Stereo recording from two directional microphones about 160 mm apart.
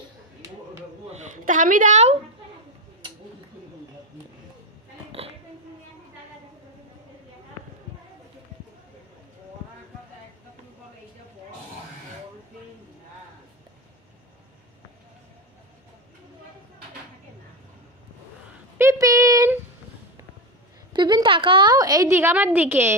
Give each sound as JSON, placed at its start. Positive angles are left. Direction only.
{"t": 1.1, "sound": "a sound", "side_deg": -55}
{"t": 18.8, "sound": "female singing", "side_deg": -20}
{"t": 20.9, "sound": "a woman's voice", "side_deg": -30}